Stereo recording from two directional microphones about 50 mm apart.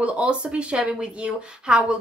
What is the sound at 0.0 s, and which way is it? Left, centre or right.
A woman's voice, right.